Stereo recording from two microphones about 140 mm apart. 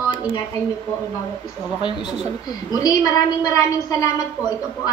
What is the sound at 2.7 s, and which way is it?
A woman's voice, 30° left (ahead or behind).